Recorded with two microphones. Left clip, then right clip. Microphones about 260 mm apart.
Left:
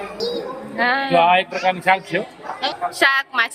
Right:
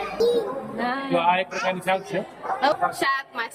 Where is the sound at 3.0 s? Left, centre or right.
Centre.